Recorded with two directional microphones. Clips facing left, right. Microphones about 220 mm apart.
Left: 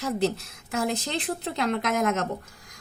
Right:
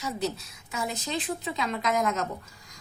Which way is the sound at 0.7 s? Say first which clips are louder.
Left 4 dB; 70° left (ahead or behind).